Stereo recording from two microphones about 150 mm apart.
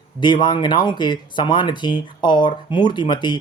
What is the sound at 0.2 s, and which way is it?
Speech, 30° left (ahead or behind).